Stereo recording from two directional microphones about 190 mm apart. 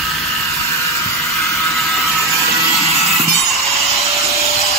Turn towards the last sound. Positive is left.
turn(degrees=0)  # may be behind; listen again after turning